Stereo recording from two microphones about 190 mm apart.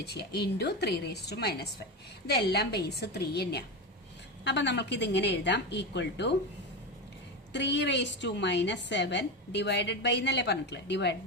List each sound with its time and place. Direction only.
0.0 s a woman's voice: 60° left (ahead or behind)
7.5 s a woman's voice: 65° left (ahead or behind)